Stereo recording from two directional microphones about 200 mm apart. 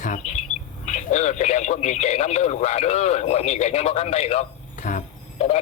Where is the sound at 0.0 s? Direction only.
40° left (ahead or behind).